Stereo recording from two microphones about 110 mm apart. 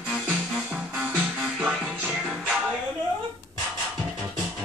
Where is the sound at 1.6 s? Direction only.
10° right (ahead or behind).